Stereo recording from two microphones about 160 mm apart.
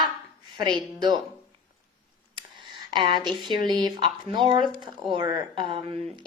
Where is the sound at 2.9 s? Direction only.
30° right (ahead or behind).